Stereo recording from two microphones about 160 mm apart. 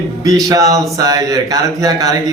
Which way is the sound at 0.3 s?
20° right (ahead or behind).